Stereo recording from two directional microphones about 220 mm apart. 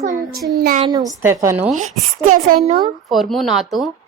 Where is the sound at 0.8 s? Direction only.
20° right (ahead or behind).